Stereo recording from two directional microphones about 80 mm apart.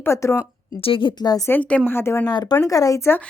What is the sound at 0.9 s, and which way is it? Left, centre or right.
Speech, left.